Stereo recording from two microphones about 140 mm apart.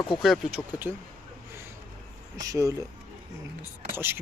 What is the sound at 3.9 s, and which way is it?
Speech, 15° right (ahead or behind).